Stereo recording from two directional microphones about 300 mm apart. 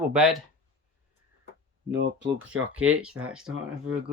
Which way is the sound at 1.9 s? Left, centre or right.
Right.